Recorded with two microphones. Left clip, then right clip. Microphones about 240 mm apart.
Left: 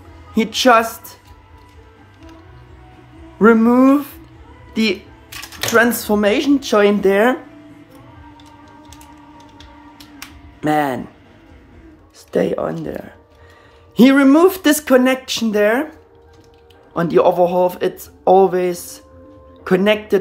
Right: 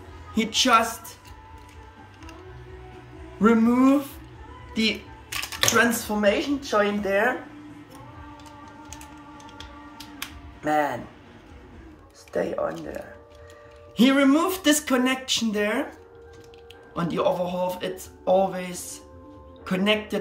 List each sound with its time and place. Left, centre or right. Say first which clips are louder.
0.3 s speech: left 7 dB; centre
3.3 s speech: left 9 dB; centre
6.0 s speech: left 7 dB; left
10.1 s finger snapping: right 1 dB; left
12.3 s speech: left 8 dB; left
13.9 s speech: left 8 dB; left
16.9 s speech: left 10 dB; centre